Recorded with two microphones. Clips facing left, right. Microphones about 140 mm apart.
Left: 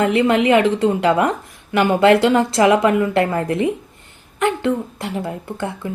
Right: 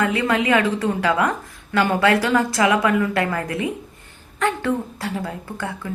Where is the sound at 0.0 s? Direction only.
25° left (ahead or behind).